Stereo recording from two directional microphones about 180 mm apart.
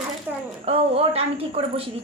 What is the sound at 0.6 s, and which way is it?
A woman's voice, 35° right (ahead or behind).